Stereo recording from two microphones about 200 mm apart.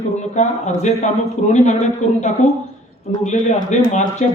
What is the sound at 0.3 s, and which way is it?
A man's voice, 35° left (ahead or behind).